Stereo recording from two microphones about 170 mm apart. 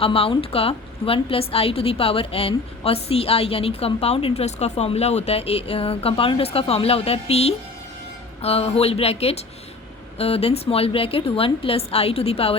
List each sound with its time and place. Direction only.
0.0 s a woman's voice: 35° left (ahead or behind)